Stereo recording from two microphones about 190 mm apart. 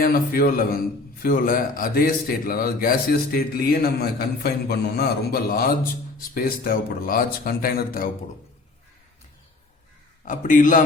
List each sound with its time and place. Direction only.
0.0 s a man's voice: 50° left (ahead or behind)
10.2 s a man's voice: 45° left (ahead or behind)